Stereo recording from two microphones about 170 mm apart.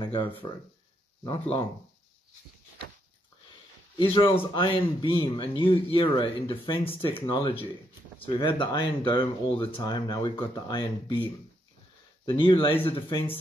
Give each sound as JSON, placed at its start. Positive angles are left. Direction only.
{"t": 0.0, "sound": "speech", "side_deg": 30}
{"t": 4.6, "sound": "speech", "side_deg": 30}
{"t": 12.3, "sound": "speech", "side_deg": 30}